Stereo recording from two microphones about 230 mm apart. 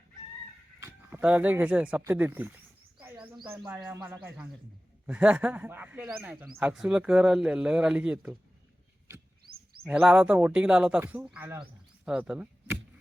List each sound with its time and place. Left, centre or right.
0.8 s speech: centre
3.0 s a sound: centre
3.7 s speech: centre
9.8 s speech: centre